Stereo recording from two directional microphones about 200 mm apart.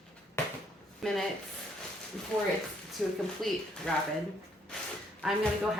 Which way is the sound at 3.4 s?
Centre (ahead or behind).